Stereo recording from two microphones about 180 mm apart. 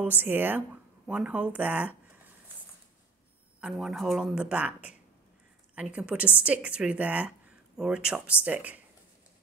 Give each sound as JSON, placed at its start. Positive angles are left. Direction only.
{"t": 0.0, "sound": "a woman's voice", "side_deg": -10}
{"t": 3.6, "sound": "a woman's voice", "side_deg": 0}